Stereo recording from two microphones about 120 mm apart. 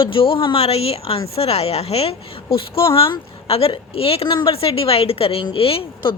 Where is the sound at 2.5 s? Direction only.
50° left (ahead or behind).